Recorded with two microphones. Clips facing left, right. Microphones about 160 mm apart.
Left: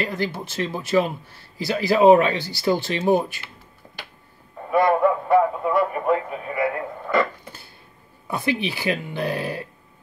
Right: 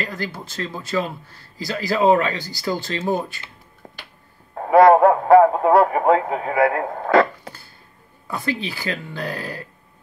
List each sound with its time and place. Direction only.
0.1 s speech: 25° left (ahead or behind)
3.8 s a sound: 60° right (ahead or behind)
4.6 s speech: 90° right
8.3 s speech: 20° left (ahead or behind)